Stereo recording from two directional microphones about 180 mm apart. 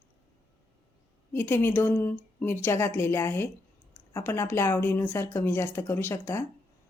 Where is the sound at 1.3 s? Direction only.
10° left (ahead or behind).